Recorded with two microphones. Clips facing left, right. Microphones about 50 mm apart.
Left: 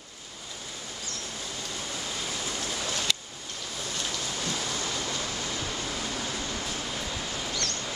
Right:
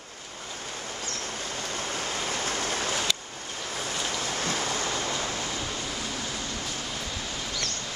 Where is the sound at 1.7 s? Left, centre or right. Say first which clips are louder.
Right 5 dB; right.